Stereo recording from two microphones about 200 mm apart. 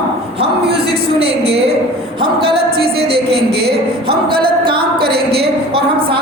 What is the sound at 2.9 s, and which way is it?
Speech, 30° right (ahead or behind).